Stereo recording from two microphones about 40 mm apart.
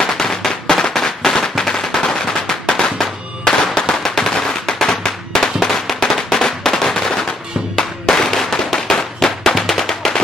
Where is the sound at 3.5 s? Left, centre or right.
Centre.